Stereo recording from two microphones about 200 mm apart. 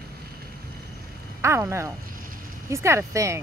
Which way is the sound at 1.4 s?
15° right (ahead or behind).